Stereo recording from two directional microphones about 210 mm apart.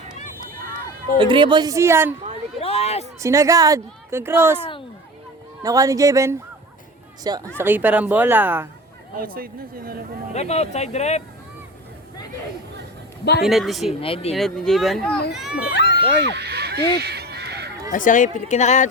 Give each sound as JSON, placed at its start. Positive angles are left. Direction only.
{"t": 1.2, "sound": "speech", "side_deg": -20}
{"t": 2.6, "sound": "a sound", "side_deg": 30}
{"t": 3.2, "sound": "speech", "side_deg": -15}
{"t": 5.6, "sound": "speech", "side_deg": -15}
{"t": 9.1, "sound": "speech", "side_deg": -45}
{"t": 10.3, "sound": "a woman's voice", "side_deg": 30}
{"t": 13.4, "sound": "speech", "side_deg": 0}
{"t": 14.0, "sound": "speech", "side_deg": 25}
{"t": 14.3, "sound": "speech", "side_deg": 0}
{"t": 15.7, "sound": "a sound", "side_deg": 50}
{"t": 16.0, "sound": "a sound", "side_deg": -50}
{"t": 17.9, "sound": "a woman's voice", "side_deg": 40}